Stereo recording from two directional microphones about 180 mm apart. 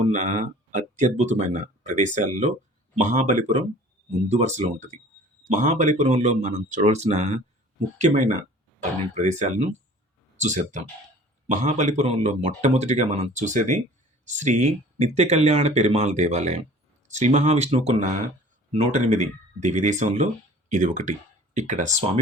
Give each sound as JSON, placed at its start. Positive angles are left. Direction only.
{"t": 0.0, "sound": "speech", "side_deg": -40}